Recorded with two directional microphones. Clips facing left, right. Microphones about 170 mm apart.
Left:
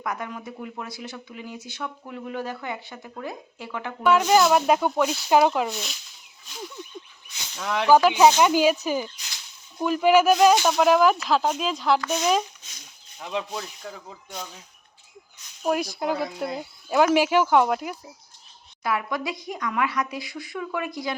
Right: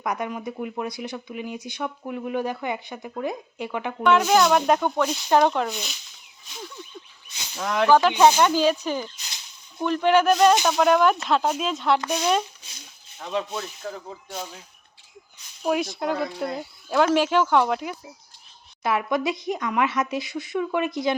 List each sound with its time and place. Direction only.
0.0 s speech: 20° right (ahead or behind)
4.0 s speech: 5° left (ahead or behind)
7.9 s speech: 5° left (ahead or behind)
11.9 s speech: 15° right (ahead or behind)
12.2 s speech: 5° left (ahead or behind)
15.6 s speech: centre (ahead or behind)
18.8 s speech: 25° right (ahead or behind)